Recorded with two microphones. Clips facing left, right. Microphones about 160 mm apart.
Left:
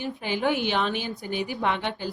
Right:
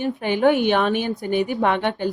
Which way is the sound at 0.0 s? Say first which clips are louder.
Right 8 dB; 55° right (ahead or behind).